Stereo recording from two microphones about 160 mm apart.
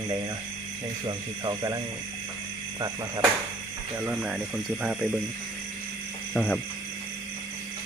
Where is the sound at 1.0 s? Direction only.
25° right (ahead or behind).